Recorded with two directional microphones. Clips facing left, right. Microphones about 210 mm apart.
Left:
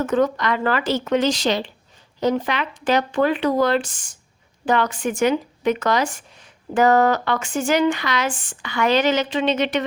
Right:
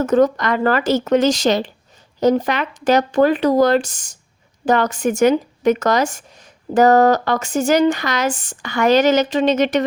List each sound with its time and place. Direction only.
0.0 s speech: 40° right (ahead or behind)